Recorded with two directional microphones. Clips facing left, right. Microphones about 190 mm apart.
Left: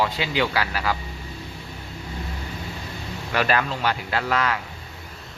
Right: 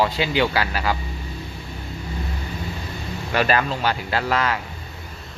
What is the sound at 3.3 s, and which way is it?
Speech, 30° right (ahead or behind).